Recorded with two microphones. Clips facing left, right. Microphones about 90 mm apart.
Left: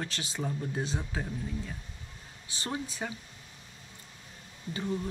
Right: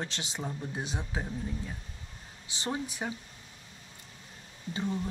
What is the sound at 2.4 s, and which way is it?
Speech, 20° right (ahead or behind).